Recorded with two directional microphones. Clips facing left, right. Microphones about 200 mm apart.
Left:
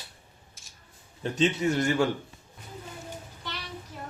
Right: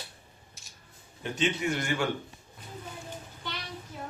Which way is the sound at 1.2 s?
35° left (ahead or behind).